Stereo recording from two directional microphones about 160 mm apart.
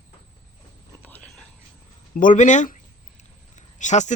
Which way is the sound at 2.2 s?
55° left (ahead or behind).